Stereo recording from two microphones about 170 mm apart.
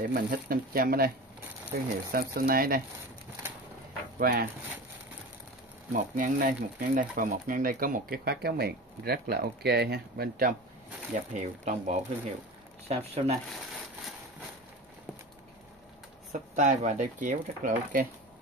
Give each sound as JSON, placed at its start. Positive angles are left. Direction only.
{"t": 0.0, "sound": "speech", "side_deg": -65}
{"t": 4.2, "sound": "speech", "side_deg": -60}
{"t": 5.9, "sound": "speech", "side_deg": -50}
{"t": 11.3, "sound": "speech", "side_deg": -45}
{"t": 16.3, "sound": "speech", "side_deg": -45}